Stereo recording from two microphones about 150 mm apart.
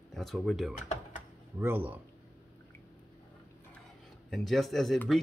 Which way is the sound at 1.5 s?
15° right (ahead or behind).